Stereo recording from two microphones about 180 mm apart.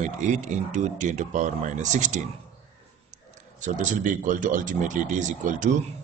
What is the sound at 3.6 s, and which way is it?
Speech, 45° right (ahead or behind).